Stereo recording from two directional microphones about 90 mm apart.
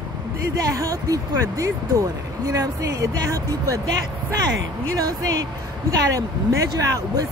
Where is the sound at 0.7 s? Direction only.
40° right (ahead or behind).